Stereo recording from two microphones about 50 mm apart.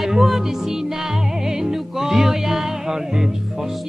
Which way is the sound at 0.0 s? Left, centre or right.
Centre.